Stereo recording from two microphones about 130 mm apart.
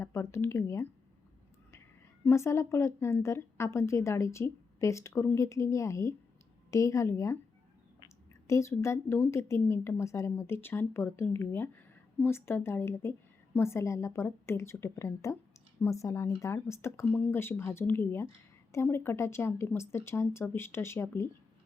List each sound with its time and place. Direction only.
0.0 s a woman's voice: 20° left (ahead or behind)
2.2 s a woman's voice: 20° left (ahead or behind)
8.0 s a sound: 20° left (ahead or behind)
9.3 s a woman's voice: 20° left (ahead or behind)